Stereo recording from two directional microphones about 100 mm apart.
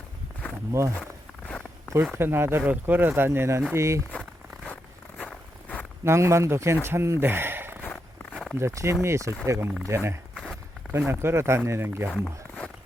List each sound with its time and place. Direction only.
0.7 s speech: 30° right (ahead or behind)
2.1 s speech: 25° right (ahead or behind)
4.1 s crumpling: 15° left (ahead or behind)
5.2 s vehicle: 10° left (ahead or behind)
6.1 s speech: 30° right (ahead or behind)
7.9 s walk: 15° left (ahead or behind)
8.5 s speech: 30° right (ahead or behind)
10.3 s walk: 5° left (ahead or behind)
10.9 s speech: 25° right (ahead or behind)
12.1 s a sound: 10° left (ahead or behind)